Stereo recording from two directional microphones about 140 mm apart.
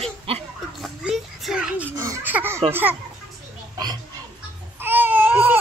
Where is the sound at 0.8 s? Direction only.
5° right (ahead or behind).